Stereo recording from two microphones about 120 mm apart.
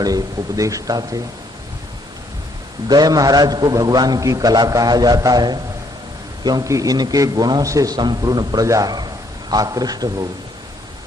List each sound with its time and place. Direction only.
0.0 s a man's voice: 30° right (ahead or behind)
2.8 s a man's voice: 35° right (ahead or behind)